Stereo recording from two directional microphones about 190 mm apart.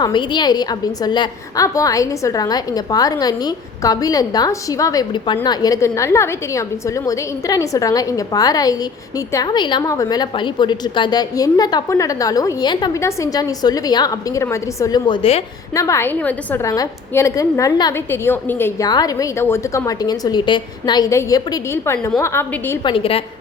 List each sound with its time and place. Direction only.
0.0 s a woman's voice: 25° left (ahead or behind)
15.7 s a woman's voice: 15° left (ahead or behind)
22.8 s a woman's voice: 25° left (ahead or behind)